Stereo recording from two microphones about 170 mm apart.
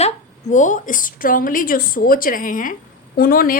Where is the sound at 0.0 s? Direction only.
45° left (ahead or behind).